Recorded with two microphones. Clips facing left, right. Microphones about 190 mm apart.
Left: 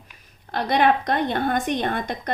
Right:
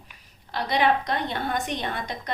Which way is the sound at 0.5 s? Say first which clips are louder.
Left 3 dB; 50° left (ahead or behind).